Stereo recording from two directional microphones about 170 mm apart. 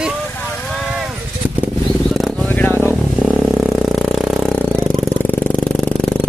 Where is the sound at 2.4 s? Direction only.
10° left (ahead or behind).